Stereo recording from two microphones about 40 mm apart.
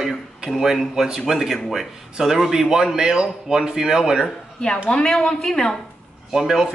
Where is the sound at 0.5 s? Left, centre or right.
Centre.